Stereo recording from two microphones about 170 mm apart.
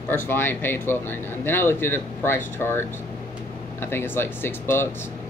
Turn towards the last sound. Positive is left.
turn(degrees=15)  # may be behind; listen again after turning